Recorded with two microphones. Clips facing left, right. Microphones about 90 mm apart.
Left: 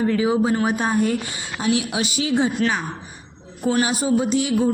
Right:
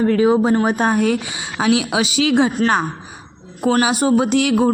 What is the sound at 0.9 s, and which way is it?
A woman's voice, 75° right (ahead or behind).